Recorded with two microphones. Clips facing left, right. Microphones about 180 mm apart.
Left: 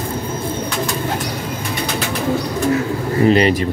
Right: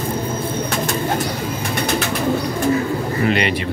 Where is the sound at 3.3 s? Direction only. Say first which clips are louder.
Left 7 dB; 35° left (ahead or behind).